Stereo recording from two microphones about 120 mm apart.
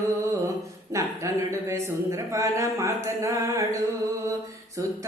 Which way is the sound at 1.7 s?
25° right (ahead or behind).